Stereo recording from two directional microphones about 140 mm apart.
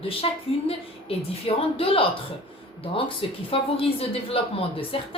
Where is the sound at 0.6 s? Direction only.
45° left (ahead or behind).